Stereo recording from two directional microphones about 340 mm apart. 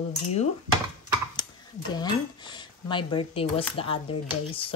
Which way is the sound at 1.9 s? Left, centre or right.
Centre.